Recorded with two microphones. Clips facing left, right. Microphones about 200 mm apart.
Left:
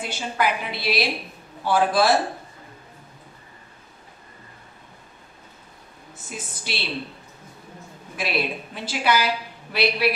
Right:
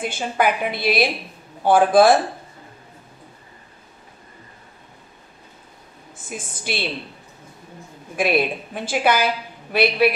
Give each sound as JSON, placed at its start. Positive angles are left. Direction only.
{"t": 0.0, "sound": "a woman's voice", "side_deg": -50}
{"t": 6.2, "sound": "a woman's voice", "side_deg": -50}
{"t": 8.2, "sound": "a woman's voice", "side_deg": -50}